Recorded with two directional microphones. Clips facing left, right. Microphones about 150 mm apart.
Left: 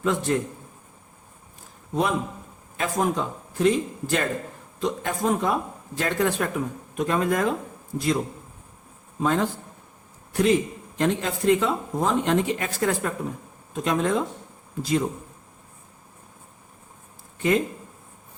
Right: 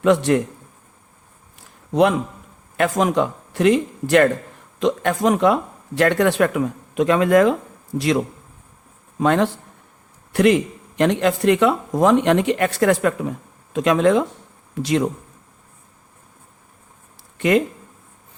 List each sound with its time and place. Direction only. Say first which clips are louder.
0.0 s a man's voice: right 8 dB; 75° right (ahead or behind)
1.9 s a man's voice: right 8 dB; 80° right
4.8 s speech: right 7 dB; 85° right
9.2 s a man's voice: right 6 dB; 75° right (ahead or behind)
17.3 s a sound: right 5 dB; 75° right (ahead or behind)